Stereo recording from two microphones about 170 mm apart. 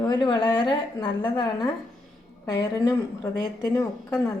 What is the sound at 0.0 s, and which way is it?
A woman's voice, 25° left (ahead or behind).